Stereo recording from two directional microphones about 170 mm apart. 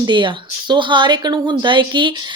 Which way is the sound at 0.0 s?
30° right (ahead or behind).